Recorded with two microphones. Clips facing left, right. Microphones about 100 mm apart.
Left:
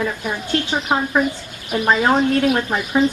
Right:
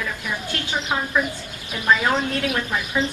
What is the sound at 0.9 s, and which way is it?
A woman's voice, 40° left (ahead or behind).